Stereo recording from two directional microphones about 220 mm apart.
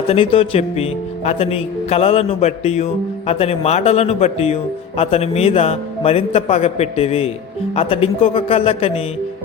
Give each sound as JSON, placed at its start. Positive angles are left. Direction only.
{"t": 0.1, "sound": "speech", "side_deg": 25}